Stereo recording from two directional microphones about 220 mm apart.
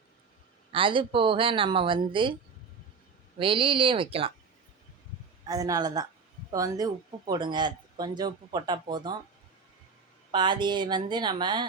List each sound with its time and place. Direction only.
0.7 s speech: 25° right (ahead or behind)
3.3 s speech: 25° right (ahead or behind)
5.5 s speech: 15° right (ahead or behind)
10.3 s speech: 20° right (ahead or behind)